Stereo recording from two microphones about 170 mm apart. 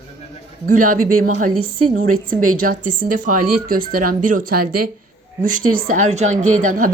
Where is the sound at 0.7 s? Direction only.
50° right (ahead or behind).